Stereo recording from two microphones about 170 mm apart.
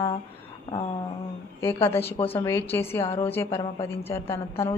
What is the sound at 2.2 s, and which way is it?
Speech, 35° left (ahead or behind).